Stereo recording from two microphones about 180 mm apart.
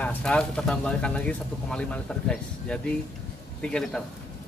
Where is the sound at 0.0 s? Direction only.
5° left (ahead or behind).